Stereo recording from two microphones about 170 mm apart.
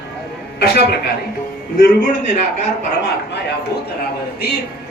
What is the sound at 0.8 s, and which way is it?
Speech, 70° left (ahead or behind).